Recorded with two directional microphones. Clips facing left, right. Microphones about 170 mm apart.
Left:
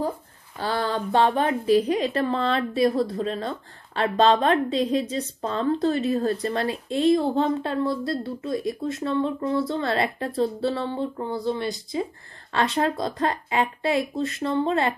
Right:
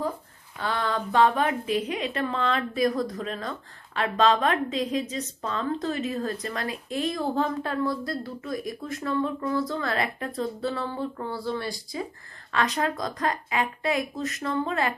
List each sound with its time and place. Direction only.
0.6 s a woman's voice: 30° left (ahead or behind)